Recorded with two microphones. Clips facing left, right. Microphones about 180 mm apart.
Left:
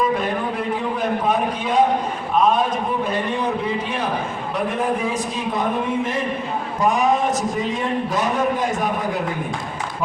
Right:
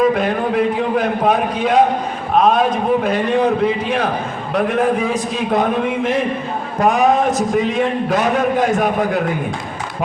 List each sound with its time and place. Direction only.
0.0 s a man's voice: 75° right (ahead or behind)
2.3 s a sound: 75° right (ahead or behind)
3.0 s a man's voice: 70° right (ahead or behind)